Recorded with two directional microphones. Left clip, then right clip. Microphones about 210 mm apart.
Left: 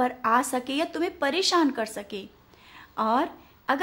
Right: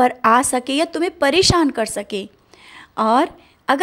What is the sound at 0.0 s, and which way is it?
A woman's voice, 35° right (ahead or behind).